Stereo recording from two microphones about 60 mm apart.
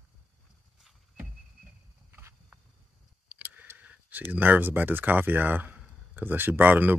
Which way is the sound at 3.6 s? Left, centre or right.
Right.